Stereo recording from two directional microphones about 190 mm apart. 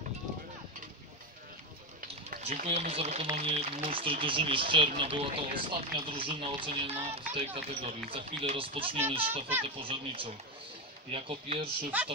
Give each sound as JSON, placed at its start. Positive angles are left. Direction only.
{"t": 2.4, "sound": "speech", "side_deg": -35}
{"t": 11.9, "sound": "speech", "side_deg": -10}